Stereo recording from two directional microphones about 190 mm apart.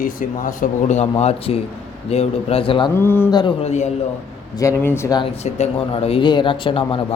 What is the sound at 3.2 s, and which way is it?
Speech, 20° left (ahead or behind).